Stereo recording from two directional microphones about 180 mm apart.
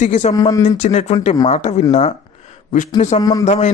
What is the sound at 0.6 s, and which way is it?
Speech, 40° left (ahead or behind).